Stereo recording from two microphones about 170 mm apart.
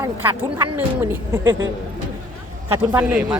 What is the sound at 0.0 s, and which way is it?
Speech, 10° right (ahead or behind).